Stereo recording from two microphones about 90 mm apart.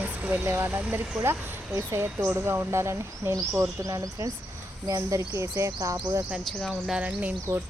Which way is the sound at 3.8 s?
40° right (ahead or behind).